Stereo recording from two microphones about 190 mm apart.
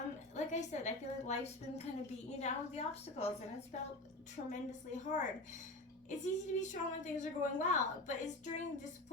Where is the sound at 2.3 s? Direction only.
35° left (ahead or behind).